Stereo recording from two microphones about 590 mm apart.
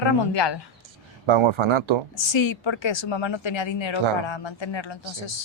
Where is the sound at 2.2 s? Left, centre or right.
Left.